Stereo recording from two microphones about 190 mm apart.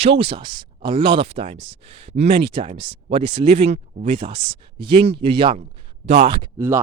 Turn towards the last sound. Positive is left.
turn(degrees=-15)  # may be behind; listen again after turning